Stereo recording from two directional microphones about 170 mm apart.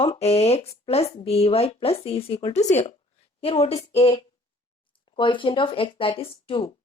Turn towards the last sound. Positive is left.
turn(degrees=30)  # may be behind; listen again after turning